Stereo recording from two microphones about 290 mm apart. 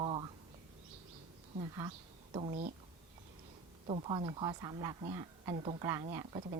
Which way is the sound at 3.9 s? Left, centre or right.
Centre.